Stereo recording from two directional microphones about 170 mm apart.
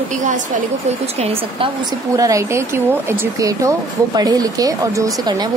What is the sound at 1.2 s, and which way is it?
Speech, 35° right (ahead or behind).